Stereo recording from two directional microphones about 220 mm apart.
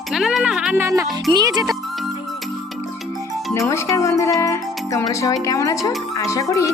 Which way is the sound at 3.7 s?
15° left (ahead or behind).